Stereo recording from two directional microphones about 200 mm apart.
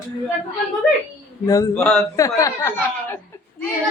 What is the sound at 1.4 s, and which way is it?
Speech, 15° left (ahead or behind).